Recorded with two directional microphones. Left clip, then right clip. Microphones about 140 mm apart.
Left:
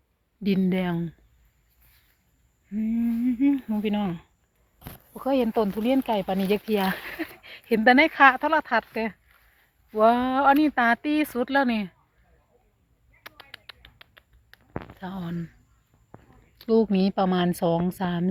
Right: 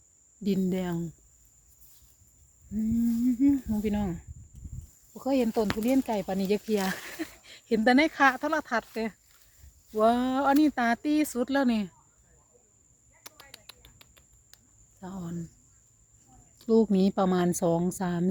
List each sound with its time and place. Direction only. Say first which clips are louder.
0.4 s speech: left 4 dB; 5° left (ahead or behind)
2.7 s speech: left 2 dB; 5° left (ahead or behind); by 11.9 s 20° right (ahead or behind)
13.2 s a sound: left 5 dB; 15° right (ahead or behind)
14.9 s speech: even; centre (ahead or behind)
16.6 s a woman's voice: left 2 dB; 20° right (ahead or behind)